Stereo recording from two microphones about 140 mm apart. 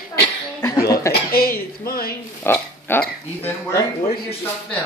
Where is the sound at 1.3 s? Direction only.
90° left.